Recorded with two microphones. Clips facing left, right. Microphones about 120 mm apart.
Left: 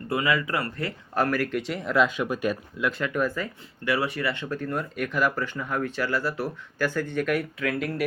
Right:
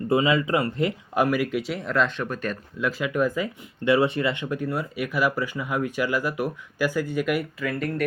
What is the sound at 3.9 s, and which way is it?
Speech, 25° right (ahead or behind).